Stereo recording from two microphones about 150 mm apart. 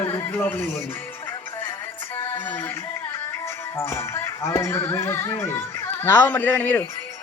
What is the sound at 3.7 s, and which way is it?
A man's voice, 20° left (ahead or behind).